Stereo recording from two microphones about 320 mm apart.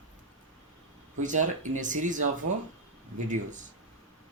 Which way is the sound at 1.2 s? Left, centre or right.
Right.